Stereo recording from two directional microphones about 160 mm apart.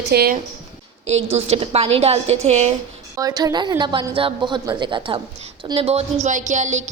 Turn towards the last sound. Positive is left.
turn(degrees=-50)  # may be behind; listen again after turning